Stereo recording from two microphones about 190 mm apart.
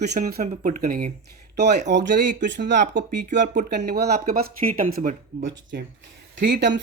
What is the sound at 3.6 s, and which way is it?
Speech, 50° right (ahead or behind).